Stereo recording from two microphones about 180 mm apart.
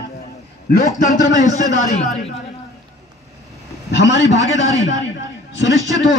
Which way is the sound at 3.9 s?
80° left.